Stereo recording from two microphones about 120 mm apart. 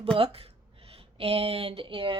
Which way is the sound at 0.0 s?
50° right (ahead or behind).